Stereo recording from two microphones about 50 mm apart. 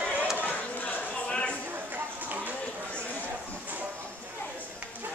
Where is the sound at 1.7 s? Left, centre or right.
Right.